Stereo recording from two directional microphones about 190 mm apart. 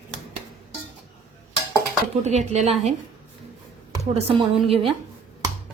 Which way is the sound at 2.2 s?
35° right (ahead or behind).